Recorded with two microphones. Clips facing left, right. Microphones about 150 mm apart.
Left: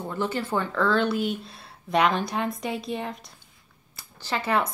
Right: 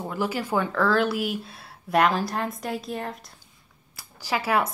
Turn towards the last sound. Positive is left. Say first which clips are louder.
# right 1 dB
turn(degrees=-5)  # may be behind; listen again after turning